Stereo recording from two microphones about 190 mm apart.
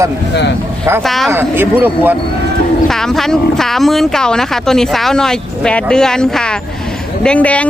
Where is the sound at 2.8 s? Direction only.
Centre (ahead or behind).